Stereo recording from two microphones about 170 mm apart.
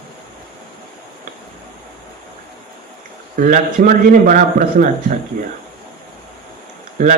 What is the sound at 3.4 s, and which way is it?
Speech, 55° right (ahead or behind).